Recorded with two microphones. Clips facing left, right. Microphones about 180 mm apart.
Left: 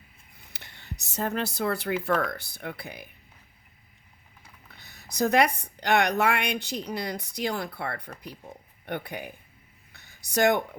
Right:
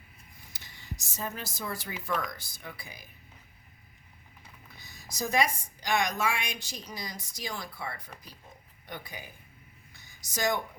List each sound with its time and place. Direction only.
0.5 s a woman's voice: 65° left (ahead or behind)
4.7 s a woman's voice: 65° left (ahead or behind)
9.9 s a sound: 60° left (ahead or behind)